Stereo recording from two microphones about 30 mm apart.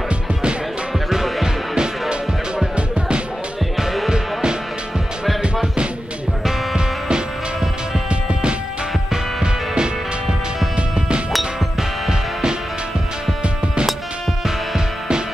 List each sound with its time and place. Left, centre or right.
1.4 s music: right
4.1 s music: right
8.1 s music: right
12.1 s music: right